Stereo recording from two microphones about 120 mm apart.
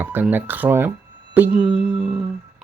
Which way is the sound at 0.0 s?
15° right (ahead or behind).